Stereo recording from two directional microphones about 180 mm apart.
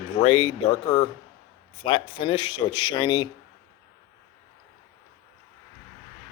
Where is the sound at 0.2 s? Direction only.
30° left (ahead or behind).